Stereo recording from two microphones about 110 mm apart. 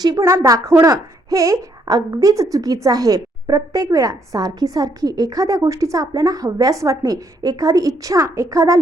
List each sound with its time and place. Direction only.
0.3 s a woman's voice: 30° right (ahead or behind)